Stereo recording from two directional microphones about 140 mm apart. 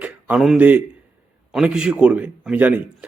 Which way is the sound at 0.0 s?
10° right (ahead or behind).